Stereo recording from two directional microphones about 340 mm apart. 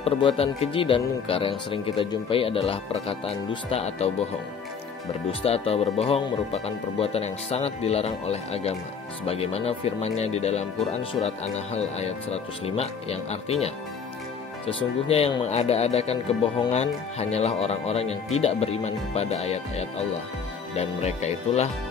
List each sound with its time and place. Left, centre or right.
0.0 s speech: centre
5.4 s speech: centre
14.7 s speech: centre